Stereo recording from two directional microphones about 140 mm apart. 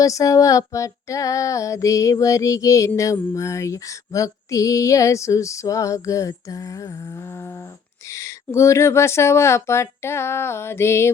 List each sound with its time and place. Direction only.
0.0 s female singing: 25° left (ahead or behind)
8.1 s female singing: 20° left (ahead or behind)